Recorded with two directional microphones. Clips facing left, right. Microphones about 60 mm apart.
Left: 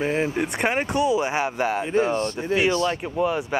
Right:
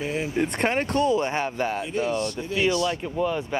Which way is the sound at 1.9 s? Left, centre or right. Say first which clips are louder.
Left 4 dB; left.